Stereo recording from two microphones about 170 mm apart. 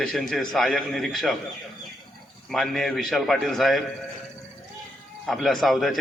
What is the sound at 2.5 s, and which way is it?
A man's voice, centre (ahead or behind).